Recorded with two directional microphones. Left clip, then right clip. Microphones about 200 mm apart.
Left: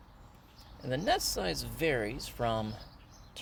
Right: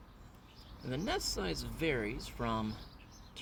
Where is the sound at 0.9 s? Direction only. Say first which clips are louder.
Left 6 dB; 55° left (ahead or behind).